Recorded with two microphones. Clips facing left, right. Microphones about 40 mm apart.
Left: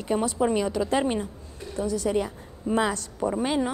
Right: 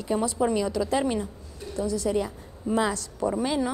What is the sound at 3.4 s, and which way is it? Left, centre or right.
Speech, left.